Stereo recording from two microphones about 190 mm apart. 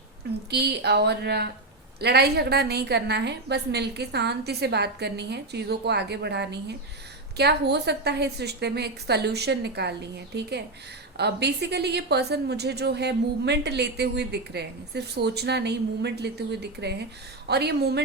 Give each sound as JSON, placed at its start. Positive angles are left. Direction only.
{"t": 0.5, "sound": "a woman's voice", "side_deg": -60}